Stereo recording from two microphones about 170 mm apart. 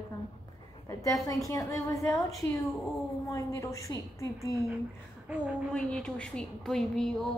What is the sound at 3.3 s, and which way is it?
A woman's voice, 20° left (ahead or behind).